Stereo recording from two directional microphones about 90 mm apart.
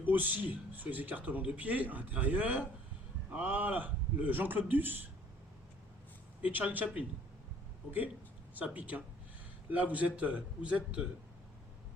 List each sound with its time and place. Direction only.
0.0 s a man's voice: 20° right (ahead or behind)
6.4 s speech: 20° right (ahead or behind)